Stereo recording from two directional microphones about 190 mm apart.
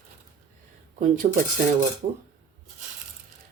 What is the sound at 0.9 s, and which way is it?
Speech, 45° right (ahead or behind).